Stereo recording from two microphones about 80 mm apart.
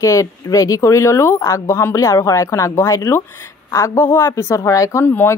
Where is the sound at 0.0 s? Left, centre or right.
Left.